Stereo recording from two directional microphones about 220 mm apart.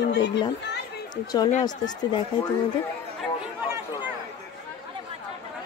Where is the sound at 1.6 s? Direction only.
20° left (ahead or behind).